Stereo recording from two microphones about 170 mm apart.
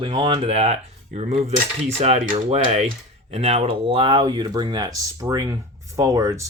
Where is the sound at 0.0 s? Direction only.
30° right (ahead or behind).